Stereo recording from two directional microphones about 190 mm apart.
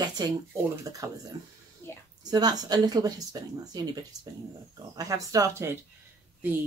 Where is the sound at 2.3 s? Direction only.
20° right (ahead or behind).